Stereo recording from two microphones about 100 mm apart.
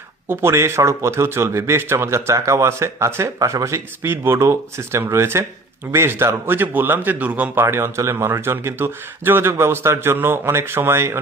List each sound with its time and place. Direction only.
0.3 s a man's voice: 25° right (ahead or behind)
7.6 s a man's voice: 25° right (ahead or behind)